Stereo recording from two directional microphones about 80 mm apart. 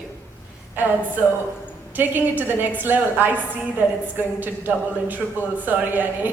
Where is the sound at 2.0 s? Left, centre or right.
Right.